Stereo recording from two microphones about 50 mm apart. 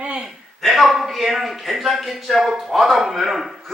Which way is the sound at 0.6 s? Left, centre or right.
Centre.